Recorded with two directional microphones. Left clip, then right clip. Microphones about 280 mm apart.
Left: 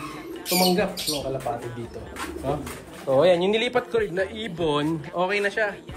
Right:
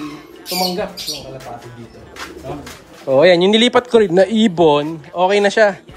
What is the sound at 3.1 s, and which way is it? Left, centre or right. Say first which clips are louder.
Speech: right 7 dB; right.